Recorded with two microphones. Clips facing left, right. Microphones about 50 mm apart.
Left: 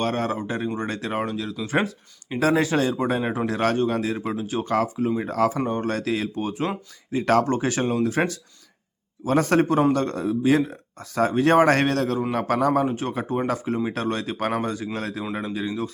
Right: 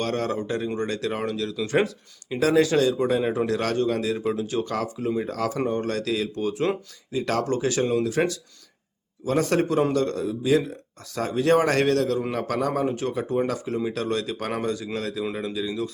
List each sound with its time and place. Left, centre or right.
0.0 s speech: left
4.6 s speech: left
5.0 s speech: centre
5.3 s speech: left
7.1 s speech: left
12.8 s speech: left